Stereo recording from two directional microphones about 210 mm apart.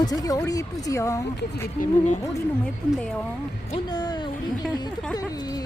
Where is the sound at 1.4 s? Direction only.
40° left (ahead or behind).